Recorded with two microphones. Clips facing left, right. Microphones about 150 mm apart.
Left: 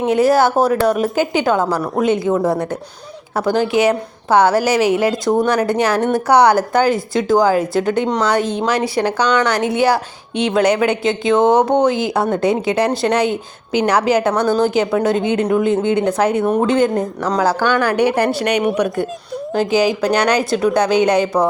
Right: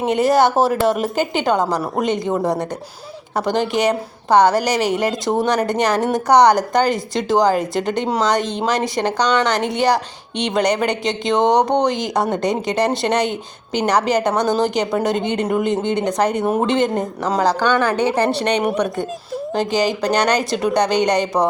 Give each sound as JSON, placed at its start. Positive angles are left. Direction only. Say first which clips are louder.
{"t": 0.0, "sound": "a woman's voice", "louder": "left 2 dB", "side_deg": 0}
{"t": 2.3, "sound": "speech", "louder": "left 3 dB", "side_deg": -15}
{"t": 3.3, "sound": "a woman's voice", "louder": "left 3 dB", "side_deg": 5}
{"t": 14.3, "sound": "a woman's voice", "louder": "left 2 dB", "side_deg": -20}
{"t": 14.6, "sound": "a woman's voice", "louder": "left 3 dB", "side_deg": 5}
{"t": 17.8, "sound": "a woman's voice", "louder": "left 2 dB", "side_deg": 10}